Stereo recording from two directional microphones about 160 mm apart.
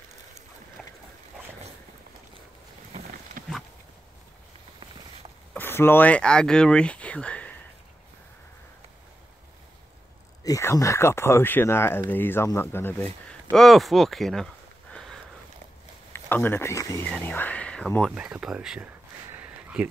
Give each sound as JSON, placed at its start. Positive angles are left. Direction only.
{"t": 0.8, "sound": "boat", "side_deg": 5}
{"t": 3.4, "sound": "a sound", "side_deg": -60}
{"t": 5.5, "sound": "speech", "side_deg": 15}
{"t": 10.4, "sound": "speech", "side_deg": 20}
{"t": 18.1, "sound": "speech", "side_deg": -5}
{"t": 19.3, "sound": "a sound", "side_deg": -10}